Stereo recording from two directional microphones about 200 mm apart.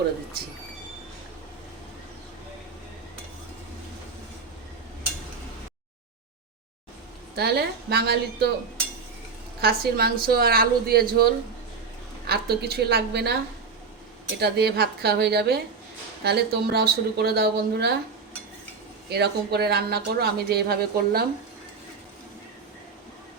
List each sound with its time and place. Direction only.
7.3 s speech: 55° right (ahead or behind)
9.6 s speech: 50° right (ahead or behind)
12.3 s speech: 50° right (ahead or behind)
19.1 s speech: 55° right (ahead or behind)